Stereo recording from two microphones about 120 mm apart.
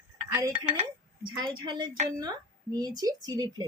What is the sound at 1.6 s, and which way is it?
Speech, 40° right (ahead or behind).